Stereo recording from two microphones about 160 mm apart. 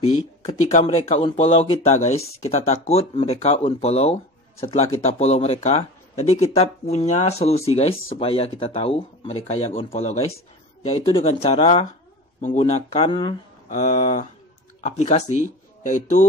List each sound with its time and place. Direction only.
0.5 s speech: 40° left (ahead or behind)
13.7 s speech: 45° left (ahead or behind)